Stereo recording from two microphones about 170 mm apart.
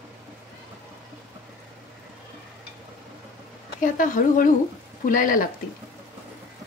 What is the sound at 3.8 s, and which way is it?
Speech, 50° left (ahead or behind).